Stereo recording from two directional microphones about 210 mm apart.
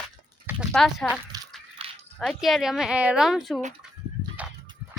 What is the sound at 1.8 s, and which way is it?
Dog, 25° right (ahead or behind).